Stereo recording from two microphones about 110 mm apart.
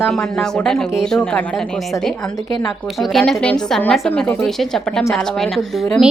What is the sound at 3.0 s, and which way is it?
A woman's voice, 5° left (ahead or behind).